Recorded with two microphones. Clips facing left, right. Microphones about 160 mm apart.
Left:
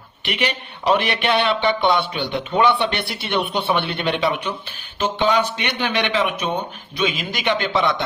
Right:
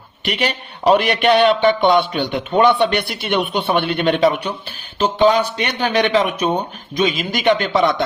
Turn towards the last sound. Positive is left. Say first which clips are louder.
# right 5 dB
turn(degrees=-45)  # may be behind; listen again after turning